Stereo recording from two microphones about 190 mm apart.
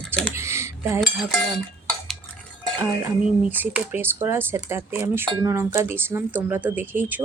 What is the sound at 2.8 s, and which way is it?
Speech, 10° right (ahead or behind).